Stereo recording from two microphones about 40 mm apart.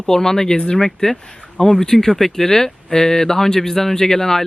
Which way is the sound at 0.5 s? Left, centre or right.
Left.